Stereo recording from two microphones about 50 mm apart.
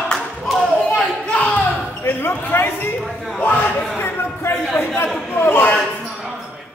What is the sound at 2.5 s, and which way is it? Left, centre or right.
Speech, left.